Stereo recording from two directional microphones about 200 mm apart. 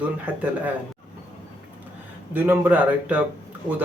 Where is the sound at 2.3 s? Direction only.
10° right (ahead or behind).